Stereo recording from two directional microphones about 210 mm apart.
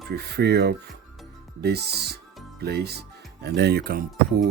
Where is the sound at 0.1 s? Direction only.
50° right (ahead or behind).